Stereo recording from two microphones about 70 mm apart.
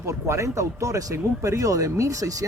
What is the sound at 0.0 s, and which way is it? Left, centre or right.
Speech, right.